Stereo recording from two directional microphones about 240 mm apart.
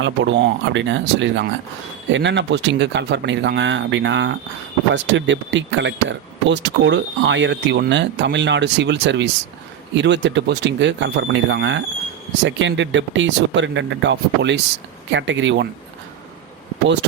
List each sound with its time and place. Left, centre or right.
0.0 s speech: right